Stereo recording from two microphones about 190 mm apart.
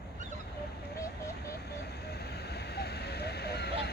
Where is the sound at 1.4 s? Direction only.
55° left (ahead or behind).